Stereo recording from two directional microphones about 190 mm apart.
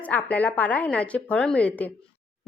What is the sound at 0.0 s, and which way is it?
A woman's voice, 5° left (ahead or behind).